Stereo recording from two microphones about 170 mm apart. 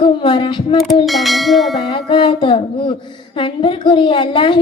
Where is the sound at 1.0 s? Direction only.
Centre (ahead or behind).